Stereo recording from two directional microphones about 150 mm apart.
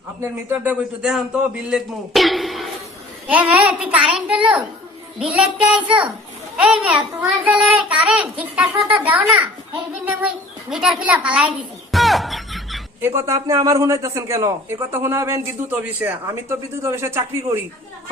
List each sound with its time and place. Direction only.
0.2 s a child's voice: 10° right (ahead or behind)
10.1 s a sound: 10° right (ahead or behind)
13.0 s a man's voice: 15° right (ahead or behind)